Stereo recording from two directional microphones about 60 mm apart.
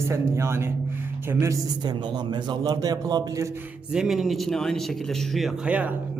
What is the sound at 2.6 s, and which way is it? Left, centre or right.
Speech, right.